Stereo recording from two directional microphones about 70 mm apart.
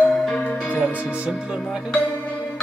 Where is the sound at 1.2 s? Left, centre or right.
Centre.